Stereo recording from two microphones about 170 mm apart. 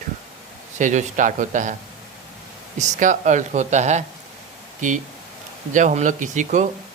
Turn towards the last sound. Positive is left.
turn(degrees=-45)  # may be behind; listen again after turning